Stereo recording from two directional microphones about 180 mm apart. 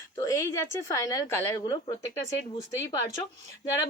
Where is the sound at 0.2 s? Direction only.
20° left (ahead or behind).